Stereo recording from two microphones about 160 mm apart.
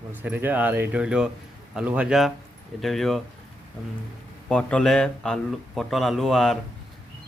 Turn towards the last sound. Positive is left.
turn(degrees=0)  # may be behind; listen again after turning